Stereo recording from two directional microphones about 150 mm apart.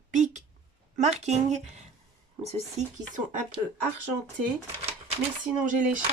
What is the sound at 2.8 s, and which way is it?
Speech, 55° right (ahead or behind).